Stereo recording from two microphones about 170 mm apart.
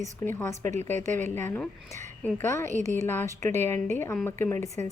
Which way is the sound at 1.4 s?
15° left (ahead or behind).